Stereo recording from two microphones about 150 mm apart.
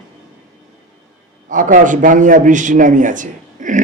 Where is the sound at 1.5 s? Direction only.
60° right (ahead or behind).